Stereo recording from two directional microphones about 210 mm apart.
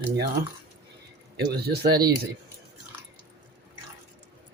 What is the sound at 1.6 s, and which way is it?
Speech, 50° right (ahead or behind).